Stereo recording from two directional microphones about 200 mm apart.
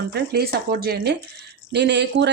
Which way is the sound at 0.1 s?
50° right (ahead or behind).